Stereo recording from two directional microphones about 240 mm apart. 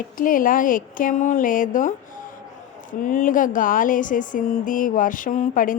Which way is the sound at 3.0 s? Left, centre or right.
Left.